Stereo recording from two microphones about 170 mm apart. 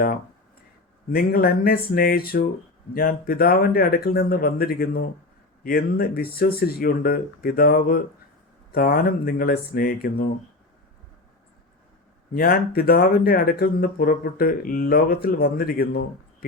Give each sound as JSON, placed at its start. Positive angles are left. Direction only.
{"t": 1.1, "sound": "speech", "side_deg": 60}
{"t": 12.3, "sound": "speech", "side_deg": 60}